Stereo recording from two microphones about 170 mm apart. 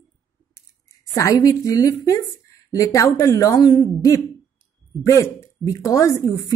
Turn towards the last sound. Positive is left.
turn(degrees=20)  # may be behind; listen again after turning